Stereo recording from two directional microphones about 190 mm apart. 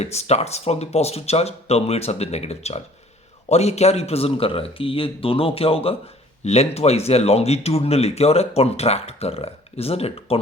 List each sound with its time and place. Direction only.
0.0 s a man's voice: 35° left (ahead or behind)